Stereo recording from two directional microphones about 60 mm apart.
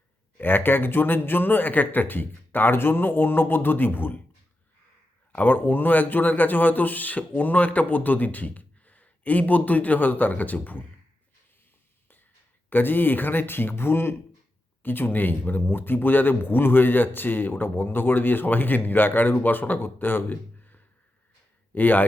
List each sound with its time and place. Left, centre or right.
0.3 s speech: left
5.3 s speech: left
12.7 s speech: left